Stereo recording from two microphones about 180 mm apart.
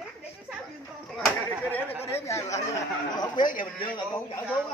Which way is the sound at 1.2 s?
10° left (ahead or behind).